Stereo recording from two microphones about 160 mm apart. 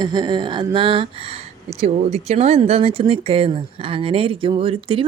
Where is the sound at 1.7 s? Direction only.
20° left (ahead or behind).